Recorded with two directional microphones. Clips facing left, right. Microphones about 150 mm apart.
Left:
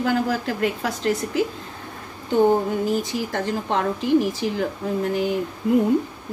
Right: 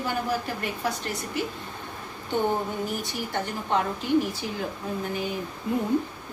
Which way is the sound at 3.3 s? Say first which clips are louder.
Right 1 dB; 90° left.